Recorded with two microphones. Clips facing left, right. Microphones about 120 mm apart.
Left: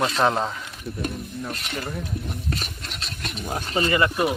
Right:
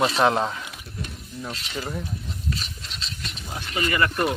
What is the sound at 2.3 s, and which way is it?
Filing, 55° left (ahead or behind).